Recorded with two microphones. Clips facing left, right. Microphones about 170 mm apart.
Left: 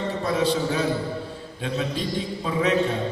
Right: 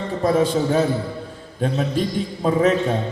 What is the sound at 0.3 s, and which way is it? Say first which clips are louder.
A man's voice: right 6 dB; 45° right (ahead or behind).